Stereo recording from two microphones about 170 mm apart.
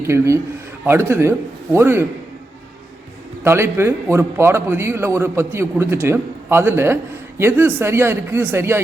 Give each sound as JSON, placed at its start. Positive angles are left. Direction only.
{"t": 0.0, "sound": "a man's voice", "side_deg": -15}
{"t": 3.4, "sound": "a man's voice", "side_deg": -15}